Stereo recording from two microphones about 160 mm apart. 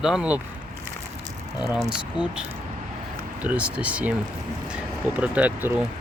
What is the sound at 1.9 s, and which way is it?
Speech, 5° right (ahead or behind).